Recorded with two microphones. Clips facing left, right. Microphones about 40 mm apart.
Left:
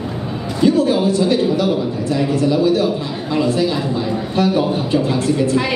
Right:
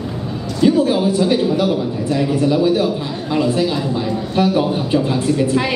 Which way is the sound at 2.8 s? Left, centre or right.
Centre.